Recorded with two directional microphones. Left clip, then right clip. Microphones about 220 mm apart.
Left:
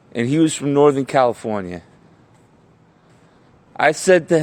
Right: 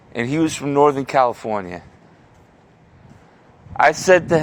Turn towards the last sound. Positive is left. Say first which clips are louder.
# even
turn(degrees=55)  # may be behind; listen again after turning